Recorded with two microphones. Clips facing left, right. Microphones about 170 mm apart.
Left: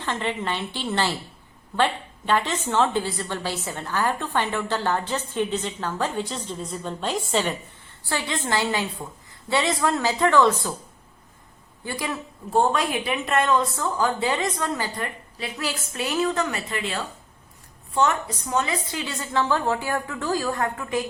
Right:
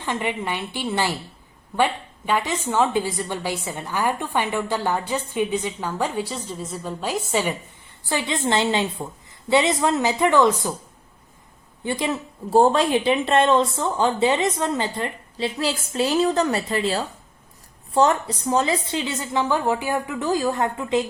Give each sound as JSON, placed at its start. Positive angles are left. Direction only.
{"t": 0.0, "sound": "a woman's voice", "side_deg": -15}
{"t": 11.9, "sound": "a woman's voice", "side_deg": -25}